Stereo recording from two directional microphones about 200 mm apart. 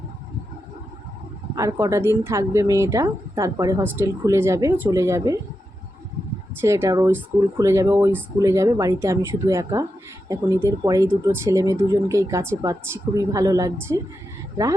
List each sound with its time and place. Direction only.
1.5 s speech: 15° right (ahead or behind)
6.6 s speech: 15° right (ahead or behind)